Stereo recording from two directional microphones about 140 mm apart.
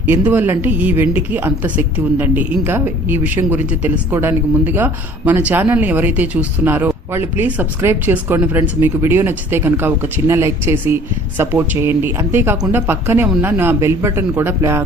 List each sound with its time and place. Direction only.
0.0 s speech: 15° right (ahead or behind)